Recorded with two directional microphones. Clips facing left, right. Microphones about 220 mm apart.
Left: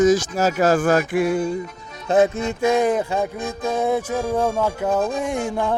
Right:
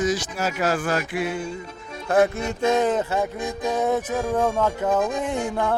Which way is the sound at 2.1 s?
20° left (ahead or behind).